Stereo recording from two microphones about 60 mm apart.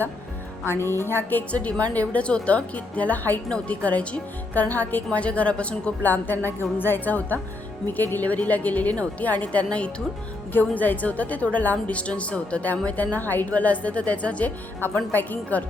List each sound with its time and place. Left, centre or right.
0.6 s a woman's voice: left; by 5.9 s centre
6.0 s a woman's voice: left
10.5 s a woman's voice: left